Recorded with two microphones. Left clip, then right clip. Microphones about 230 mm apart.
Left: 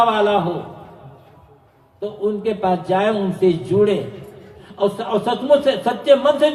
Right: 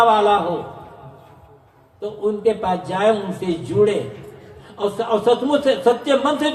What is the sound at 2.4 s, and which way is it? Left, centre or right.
A man's voice, left.